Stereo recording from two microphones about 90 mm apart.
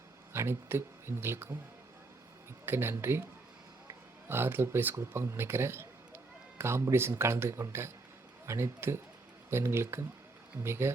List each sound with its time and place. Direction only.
0.3 s speech: 30° right (ahead or behind)
2.6 s speech: 25° right (ahead or behind)
4.3 s a man's voice: 25° right (ahead or behind)